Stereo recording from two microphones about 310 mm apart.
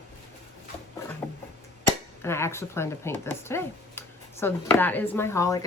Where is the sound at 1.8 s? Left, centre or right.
Centre.